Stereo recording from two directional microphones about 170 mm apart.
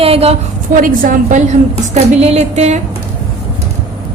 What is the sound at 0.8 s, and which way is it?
A woman's voice, 55° right (ahead or behind).